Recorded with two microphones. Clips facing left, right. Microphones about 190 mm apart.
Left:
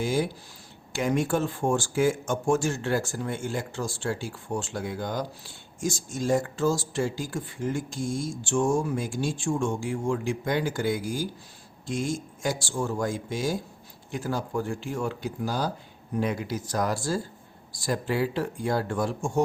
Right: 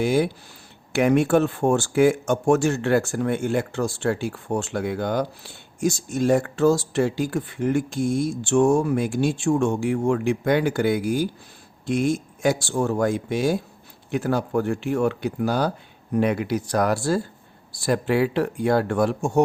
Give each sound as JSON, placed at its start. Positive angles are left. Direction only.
{"t": 0.0, "sound": "speech", "side_deg": -65}